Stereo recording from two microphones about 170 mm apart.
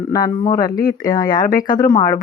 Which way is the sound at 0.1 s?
20° left (ahead or behind).